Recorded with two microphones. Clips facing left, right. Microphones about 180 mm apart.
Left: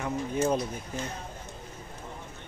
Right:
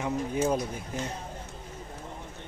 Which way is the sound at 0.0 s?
10° right (ahead or behind).